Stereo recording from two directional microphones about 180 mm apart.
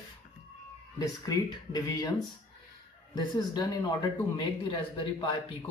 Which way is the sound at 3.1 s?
25° left (ahead or behind).